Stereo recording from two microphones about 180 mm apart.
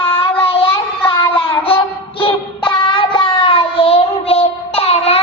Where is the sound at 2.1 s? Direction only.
30° left (ahead or behind).